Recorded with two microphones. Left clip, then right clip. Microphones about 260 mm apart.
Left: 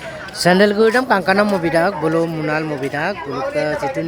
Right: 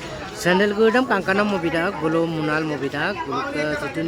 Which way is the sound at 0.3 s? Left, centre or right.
Left.